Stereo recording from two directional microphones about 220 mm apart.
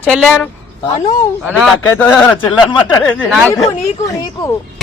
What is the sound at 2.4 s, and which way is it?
Speech, 20° left (ahead or behind).